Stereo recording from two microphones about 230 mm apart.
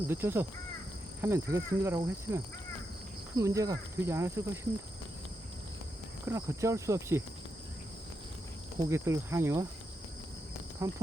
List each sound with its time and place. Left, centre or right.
0.1 s speech: centre
6.2 s speech: centre
8.9 s speech: centre
10.8 s speech: centre